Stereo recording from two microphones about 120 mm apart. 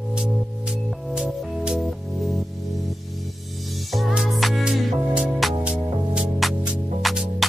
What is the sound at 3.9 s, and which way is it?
Music, centre (ahead or behind).